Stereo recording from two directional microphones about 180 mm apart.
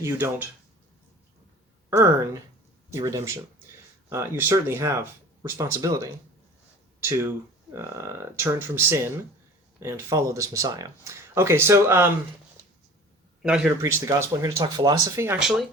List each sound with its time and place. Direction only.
0.0 s speech: 10° right (ahead or behind)
2.9 s speech: 15° right (ahead or behind)
13.4 s speech: 5° right (ahead or behind)
13.8 s speech: 15° right (ahead or behind)
15.4 s speech: centre (ahead or behind)